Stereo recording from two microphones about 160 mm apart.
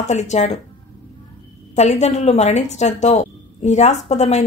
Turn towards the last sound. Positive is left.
turn(degrees=45)  # may be behind; listen again after turning